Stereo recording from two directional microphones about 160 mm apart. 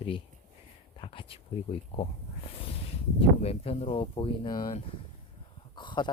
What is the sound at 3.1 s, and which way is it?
Speech, 40° left (ahead or behind).